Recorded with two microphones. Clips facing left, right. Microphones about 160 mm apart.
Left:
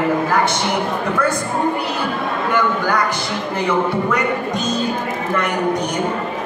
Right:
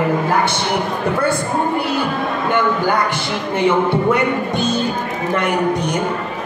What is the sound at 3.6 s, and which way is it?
Speech, 25° right (ahead or behind).